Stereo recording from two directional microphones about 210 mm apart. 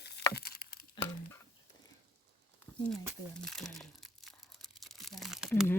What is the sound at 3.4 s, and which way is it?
Crumpling, centre (ahead or behind).